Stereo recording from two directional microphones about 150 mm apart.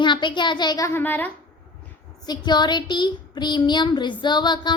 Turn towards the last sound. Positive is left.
turn(degrees=30)  # may be behind; listen again after turning